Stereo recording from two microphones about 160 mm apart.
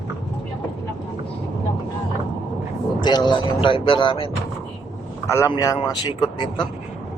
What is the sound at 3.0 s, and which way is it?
Speech, 25° left (ahead or behind).